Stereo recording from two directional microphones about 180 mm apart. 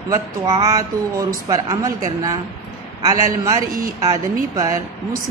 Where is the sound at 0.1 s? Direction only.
20° right (ahead or behind).